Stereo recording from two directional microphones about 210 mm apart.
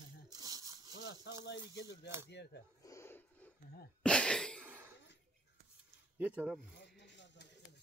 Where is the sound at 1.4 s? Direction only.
55° left (ahead or behind).